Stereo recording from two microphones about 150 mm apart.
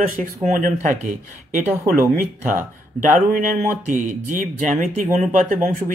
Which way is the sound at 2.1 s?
60° right (ahead or behind).